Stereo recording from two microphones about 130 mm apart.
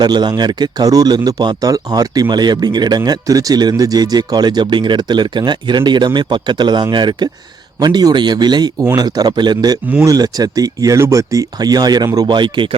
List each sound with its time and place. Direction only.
0.0 s speech: 35° right (ahead or behind)